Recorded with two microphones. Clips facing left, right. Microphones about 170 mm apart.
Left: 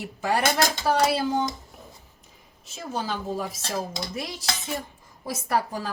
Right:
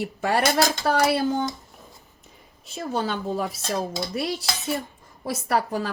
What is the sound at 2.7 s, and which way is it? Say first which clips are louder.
A woman's voice: right 4 dB; 65° right (ahead or behind).